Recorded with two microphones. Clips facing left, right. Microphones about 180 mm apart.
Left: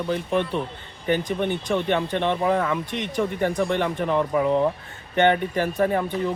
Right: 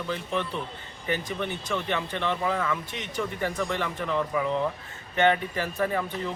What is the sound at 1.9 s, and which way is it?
Speech, 50° left (ahead or behind).